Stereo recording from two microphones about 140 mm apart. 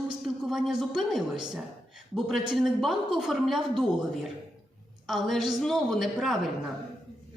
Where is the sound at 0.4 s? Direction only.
Centre (ahead or behind).